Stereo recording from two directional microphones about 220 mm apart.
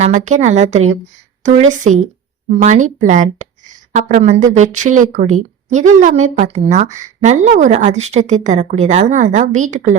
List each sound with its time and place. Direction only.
0.0 s a woman's voice: 30° right (ahead or behind)